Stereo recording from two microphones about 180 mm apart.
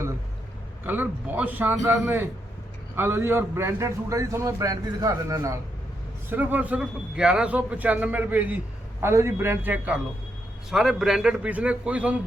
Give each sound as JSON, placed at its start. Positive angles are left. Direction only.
{"t": 0.9, "sound": "a man's voice", "side_deg": -10}